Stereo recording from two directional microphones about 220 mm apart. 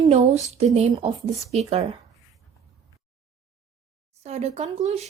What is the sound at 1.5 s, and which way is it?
Speech, 30° right (ahead or behind).